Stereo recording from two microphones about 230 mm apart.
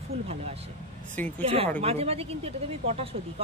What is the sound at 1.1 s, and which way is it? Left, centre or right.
Speech, centre.